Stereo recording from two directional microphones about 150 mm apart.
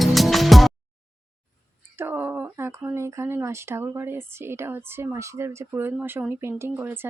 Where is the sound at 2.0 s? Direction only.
15° right (ahead or behind).